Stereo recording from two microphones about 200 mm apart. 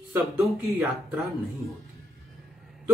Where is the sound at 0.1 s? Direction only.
Centre (ahead or behind).